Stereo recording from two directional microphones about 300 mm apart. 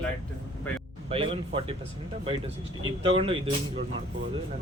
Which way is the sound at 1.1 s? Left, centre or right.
Centre.